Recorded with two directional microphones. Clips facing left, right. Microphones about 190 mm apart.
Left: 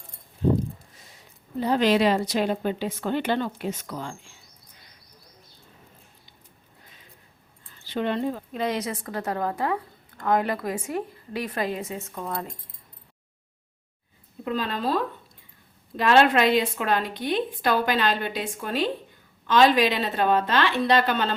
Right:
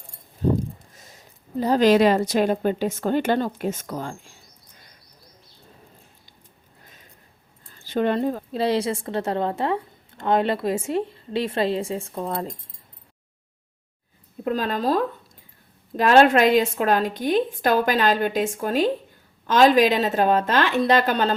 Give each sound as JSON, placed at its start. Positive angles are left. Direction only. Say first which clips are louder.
{"t": 0.9, "sound": "a woman's voice", "louder": "right 3 dB", "side_deg": -45}
{"t": 7.7, "sound": "a woman's voice", "louder": "right 5 dB", "side_deg": -45}
{"t": 14.4, "sound": "a woman's voice", "louder": "right 4 dB", "side_deg": -45}